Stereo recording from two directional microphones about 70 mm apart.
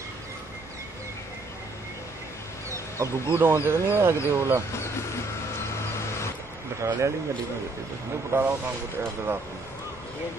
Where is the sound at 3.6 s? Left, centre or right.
Right.